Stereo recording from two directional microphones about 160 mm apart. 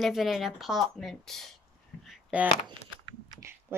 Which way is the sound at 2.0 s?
10° right (ahead or behind).